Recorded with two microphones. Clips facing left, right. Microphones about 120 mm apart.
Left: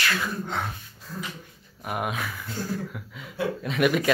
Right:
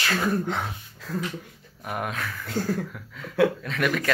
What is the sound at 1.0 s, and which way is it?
Music, 90° right.